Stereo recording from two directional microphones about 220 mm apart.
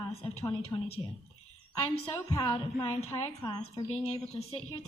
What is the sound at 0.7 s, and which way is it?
Speech, 15° left (ahead or behind).